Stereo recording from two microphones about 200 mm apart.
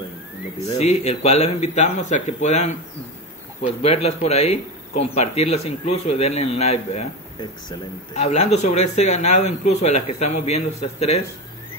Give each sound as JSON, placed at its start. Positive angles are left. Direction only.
{"t": 0.7, "sound": "a man's voice", "side_deg": 35}